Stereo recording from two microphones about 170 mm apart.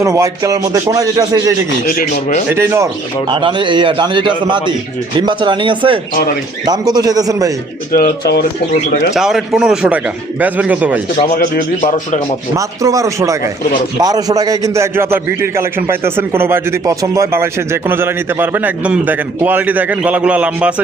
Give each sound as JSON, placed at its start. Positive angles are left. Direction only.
{"t": 0.0, "sound": "a man's voice", "side_deg": -20}
{"t": 3.2, "sound": "speech", "side_deg": -30}
{"t": 7.9, "sound": "speech", "side_deg": 60}
{"t": 9.1, "sound": "a man's voice", "side_deg": 0}
{"t": 11.2, "sound": "speech", "side_deg": 60}
{"t": 12.5, "sound": "a man's voice", "side_deg": -20}